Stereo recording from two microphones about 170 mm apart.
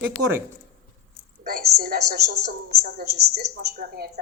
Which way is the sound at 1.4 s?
65° right (ahead or behind).